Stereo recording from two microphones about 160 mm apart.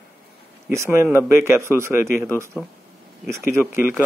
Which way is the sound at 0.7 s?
15° right (ahead or behind).